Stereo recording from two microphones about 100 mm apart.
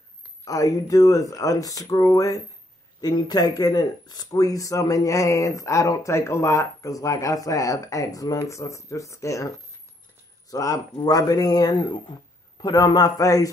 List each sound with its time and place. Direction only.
0.5 s speech: 35° left (ahead or behind)
10.5 s speech: 35° left (ahead or behind)